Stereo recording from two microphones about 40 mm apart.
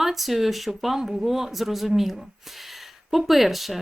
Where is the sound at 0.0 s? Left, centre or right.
Centre.